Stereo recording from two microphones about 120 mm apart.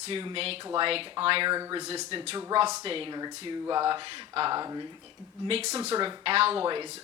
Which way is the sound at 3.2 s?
35° right (ahead or behind).